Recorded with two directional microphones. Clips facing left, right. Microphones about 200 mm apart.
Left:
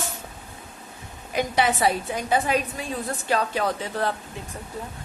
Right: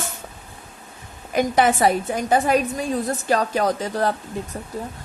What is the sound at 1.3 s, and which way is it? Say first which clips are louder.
A woman's voice: right 5 dB; 50° right (ahead or behind).